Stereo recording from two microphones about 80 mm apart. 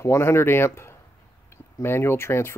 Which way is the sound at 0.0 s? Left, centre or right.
Left.